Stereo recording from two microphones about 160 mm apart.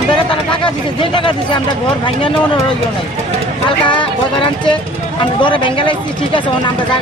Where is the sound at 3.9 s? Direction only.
30° left (ahead or behind).